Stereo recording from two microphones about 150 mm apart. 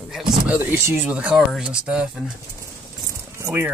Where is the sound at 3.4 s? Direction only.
15° right (ahead or behind).